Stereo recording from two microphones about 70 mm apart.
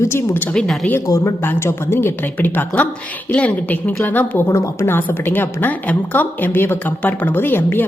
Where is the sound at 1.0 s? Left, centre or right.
Left.